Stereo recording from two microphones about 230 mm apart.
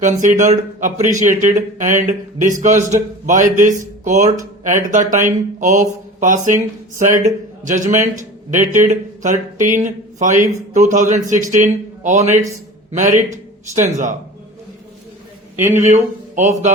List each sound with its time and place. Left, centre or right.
0.0 s speech: right
7.6 s a man's voice: right
15.7 s speech: right